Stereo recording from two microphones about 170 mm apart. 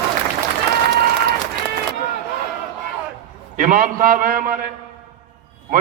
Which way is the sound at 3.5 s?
50° right (ahead or behind).